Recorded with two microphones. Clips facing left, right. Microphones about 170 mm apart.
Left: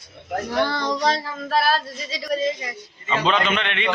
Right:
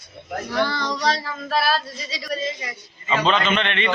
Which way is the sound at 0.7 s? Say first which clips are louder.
Left 2 dB; 55° left (ahead or behind).